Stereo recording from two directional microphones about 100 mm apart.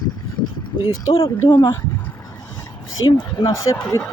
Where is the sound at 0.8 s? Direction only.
65° left (ahead or behind).